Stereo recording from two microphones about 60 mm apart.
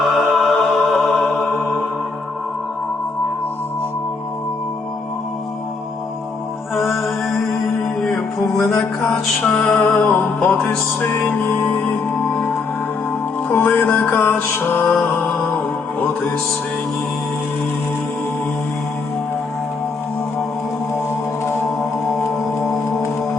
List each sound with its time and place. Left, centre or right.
0.0 s music: centre
6.7 s music: centre
9.4 s music: left
12.3 s music: left